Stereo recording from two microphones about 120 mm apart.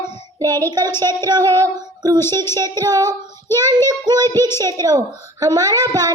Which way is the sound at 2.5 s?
30° right (ahead or behind).